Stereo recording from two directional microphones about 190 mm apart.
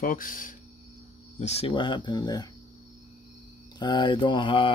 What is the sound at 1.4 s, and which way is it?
Speech, 35° left (ahead or behind).